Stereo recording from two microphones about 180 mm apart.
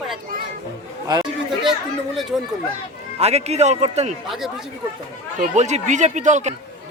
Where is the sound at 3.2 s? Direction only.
35° right (ahead or behind).